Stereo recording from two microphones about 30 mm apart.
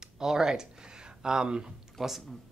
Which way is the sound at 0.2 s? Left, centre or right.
Centre.